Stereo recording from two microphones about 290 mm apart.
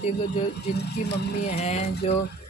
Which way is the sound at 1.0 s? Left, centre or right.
Left.